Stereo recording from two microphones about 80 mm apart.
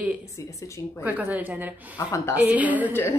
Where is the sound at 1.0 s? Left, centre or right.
Centre.